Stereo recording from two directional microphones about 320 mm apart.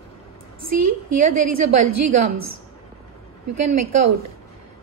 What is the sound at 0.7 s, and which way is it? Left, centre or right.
A woman's voice, right.